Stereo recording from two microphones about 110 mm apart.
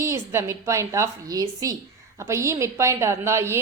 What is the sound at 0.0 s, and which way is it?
A woman's voice, 25° right (ahead or behind).